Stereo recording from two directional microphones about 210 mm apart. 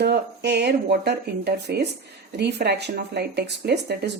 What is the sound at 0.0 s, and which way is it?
Speech, 50° right (ahead or behind).